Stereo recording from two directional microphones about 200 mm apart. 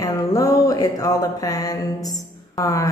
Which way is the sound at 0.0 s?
15° left (ahead or behind).